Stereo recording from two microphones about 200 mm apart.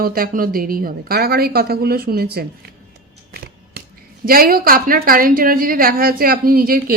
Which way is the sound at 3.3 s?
50° right (ahead or behind).